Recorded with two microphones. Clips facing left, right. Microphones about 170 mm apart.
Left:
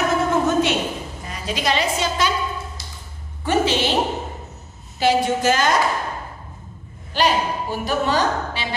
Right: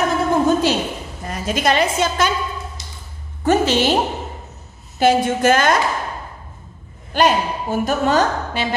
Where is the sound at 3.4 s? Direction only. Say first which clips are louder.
Right 4 dB; 45° right (ahead or behind).